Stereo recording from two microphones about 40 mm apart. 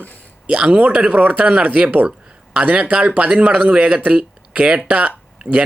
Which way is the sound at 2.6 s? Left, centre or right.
Right.